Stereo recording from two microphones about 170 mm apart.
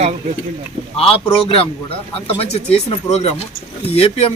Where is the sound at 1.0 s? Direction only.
35° left (ahead or behind).